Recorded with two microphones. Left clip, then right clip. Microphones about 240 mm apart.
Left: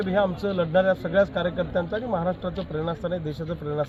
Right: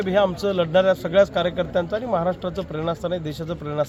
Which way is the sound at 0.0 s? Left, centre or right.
Right.